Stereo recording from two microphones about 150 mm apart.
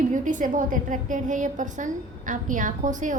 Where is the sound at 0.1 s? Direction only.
60° right (ahead or behind).